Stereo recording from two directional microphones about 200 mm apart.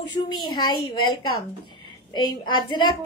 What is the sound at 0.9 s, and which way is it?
Speech, 90° left.